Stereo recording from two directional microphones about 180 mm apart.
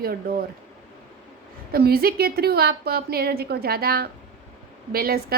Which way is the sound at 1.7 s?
60° right (ahead or behind).